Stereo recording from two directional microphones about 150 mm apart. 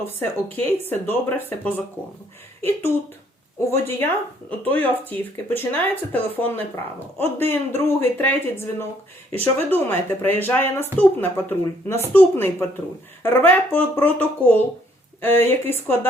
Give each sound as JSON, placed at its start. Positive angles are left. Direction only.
{"t": 0.2, "sound": "speech", "side_deg": 15}
{"t": 3.7, "sound": "speech", "side_deg": 15}